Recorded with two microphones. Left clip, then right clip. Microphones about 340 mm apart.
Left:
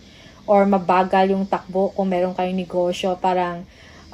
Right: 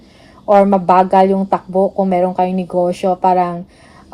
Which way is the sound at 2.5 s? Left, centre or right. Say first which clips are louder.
Right 6 dB; right.